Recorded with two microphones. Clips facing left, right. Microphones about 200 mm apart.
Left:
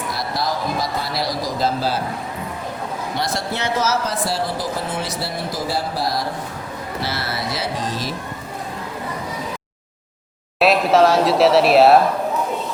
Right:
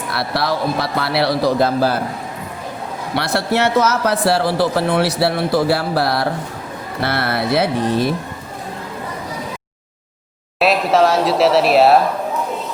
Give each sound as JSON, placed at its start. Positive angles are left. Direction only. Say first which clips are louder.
{"t": 0.1, "sound": "speech", "louder": "right 5 dB", "side_deg": -65}
{"t": 3.2, "sound": "speech", "louder": "right 8 dB", "side_deg": -70}
{"t": 10.6, "sound": "speech", "louder": "even", "side_deg": 0}